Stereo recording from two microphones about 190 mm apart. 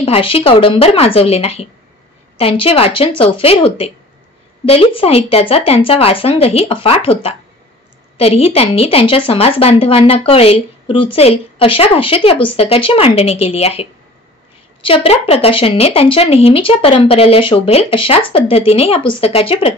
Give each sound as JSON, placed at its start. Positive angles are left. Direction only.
{"t": 0.0, "sound": "a woman's voice", "side_deg": 30}
{"t": 8.2, "sound": "a woman's voice", "side_deg": 30}